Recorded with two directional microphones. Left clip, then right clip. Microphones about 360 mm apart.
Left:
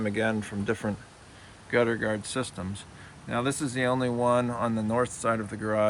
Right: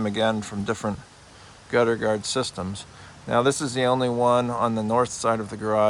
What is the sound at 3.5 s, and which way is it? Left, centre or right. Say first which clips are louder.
Speech: right 4 dB; right.